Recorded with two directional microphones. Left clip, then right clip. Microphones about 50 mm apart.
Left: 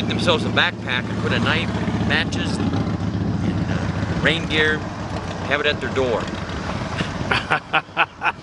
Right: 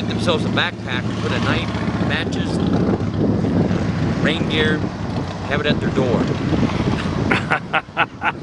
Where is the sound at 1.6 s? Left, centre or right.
Right.